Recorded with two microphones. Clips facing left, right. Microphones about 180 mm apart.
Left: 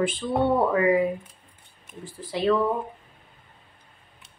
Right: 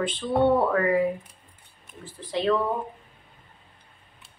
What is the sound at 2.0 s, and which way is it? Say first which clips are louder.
Speech: left 1 dB; 10° left (ahead or behind).